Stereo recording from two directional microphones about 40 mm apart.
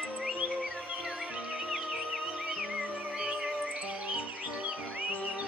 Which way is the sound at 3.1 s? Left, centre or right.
Centre.